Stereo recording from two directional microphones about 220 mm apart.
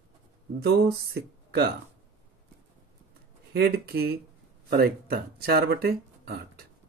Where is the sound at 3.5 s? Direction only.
45° right (ahead or behind).